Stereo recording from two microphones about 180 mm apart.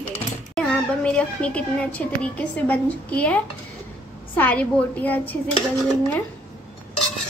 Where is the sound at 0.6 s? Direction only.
5° left (ahead or behind).